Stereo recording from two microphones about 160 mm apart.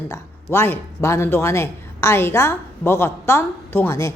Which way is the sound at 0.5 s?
15° left (ahead or behind).